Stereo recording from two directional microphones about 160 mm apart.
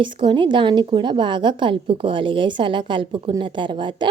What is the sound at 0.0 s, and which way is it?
A woman's voice, 30° right (ahead or behind).